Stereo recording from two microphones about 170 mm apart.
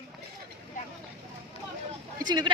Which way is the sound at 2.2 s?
25° right (ahead or behind).